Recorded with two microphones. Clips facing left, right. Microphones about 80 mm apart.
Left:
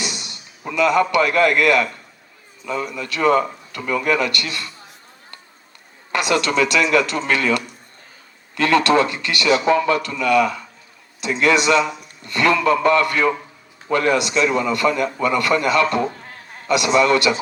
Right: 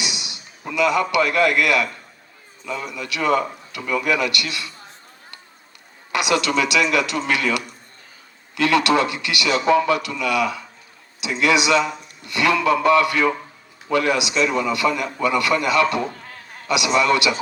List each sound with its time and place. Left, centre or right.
0.0 s a man's voice: left
6.1 s a man's voice: left